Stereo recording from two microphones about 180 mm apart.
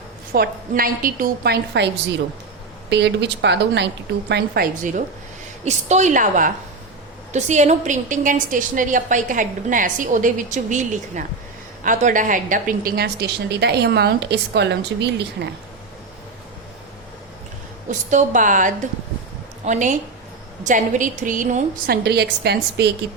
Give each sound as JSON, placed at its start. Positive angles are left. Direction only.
{"t": 0.3, "sound": "a woman's voice", "side_deg": -55}
{"t": 2.9, "sound": "a woman's voice", "side_deg": -75}
{"t": 4.3, "sound": "a woman's voice", "side_deg": -65}
{"t": 17.8, "sound": "a woman's voice", "side_deg": -45}
{"t": 22.0, "sound": "a woman's voice", "side_deg": -65}